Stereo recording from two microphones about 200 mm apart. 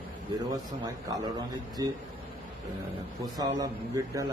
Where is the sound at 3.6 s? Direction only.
15° right (ahead or behind).